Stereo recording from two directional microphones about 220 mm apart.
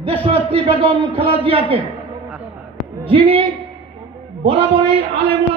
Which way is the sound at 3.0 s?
25° right (ahead or behind).